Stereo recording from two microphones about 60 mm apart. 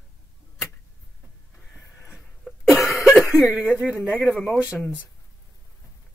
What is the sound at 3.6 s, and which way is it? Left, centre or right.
Speech, centre.